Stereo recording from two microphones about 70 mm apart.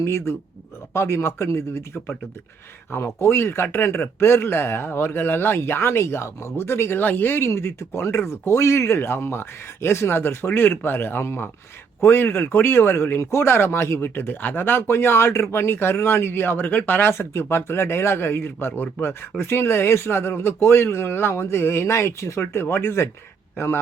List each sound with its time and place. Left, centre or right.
0.0 s speech: left